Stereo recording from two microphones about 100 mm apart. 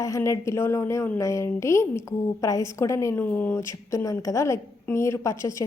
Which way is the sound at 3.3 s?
20° left (ahead or behind).